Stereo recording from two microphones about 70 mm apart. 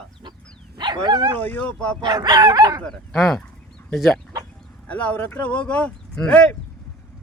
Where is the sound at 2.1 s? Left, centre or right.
Right.